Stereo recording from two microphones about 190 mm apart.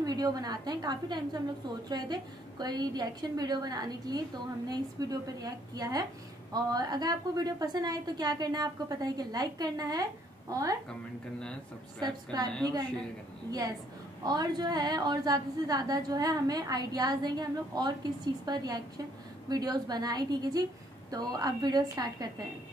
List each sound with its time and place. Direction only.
0.0 s a woman's voice: 20° right (ahead or behind)
10.9 s speech: 5° left (ahead or behind)
12.0 s a woman's voice: 20° right (ahead or behind)
13.5 s a woman's voice: 20° right (ahead or behind)